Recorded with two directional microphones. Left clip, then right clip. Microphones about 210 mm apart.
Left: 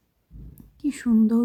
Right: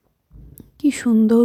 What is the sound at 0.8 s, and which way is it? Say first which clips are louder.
Speech: right 5 dB; 25° right (ahead or behind).